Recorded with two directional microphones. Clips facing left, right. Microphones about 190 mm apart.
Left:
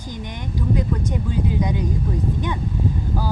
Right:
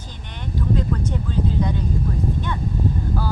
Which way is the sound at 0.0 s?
15° left (ahead or behind).